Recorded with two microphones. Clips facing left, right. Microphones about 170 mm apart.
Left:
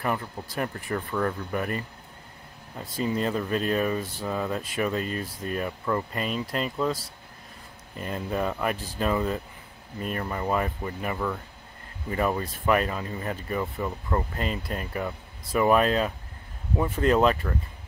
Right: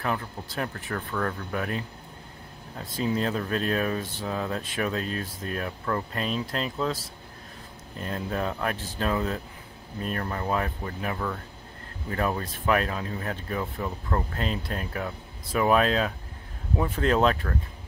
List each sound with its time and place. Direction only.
0.0 s speech: 10° left (ahead or behind)
3.2 s speech: 5° left (ahead or behind)
8.0 s speech: 5° left (ahead or behind)